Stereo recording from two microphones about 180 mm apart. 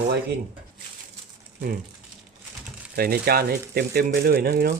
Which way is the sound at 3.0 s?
55° right (ahead or behind).